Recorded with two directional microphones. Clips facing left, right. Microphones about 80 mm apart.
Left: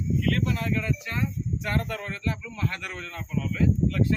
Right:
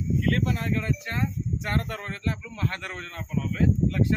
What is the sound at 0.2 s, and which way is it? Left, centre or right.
Speech, right.